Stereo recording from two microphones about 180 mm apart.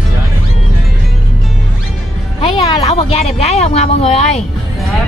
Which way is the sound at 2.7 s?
30° left (ahead or behind).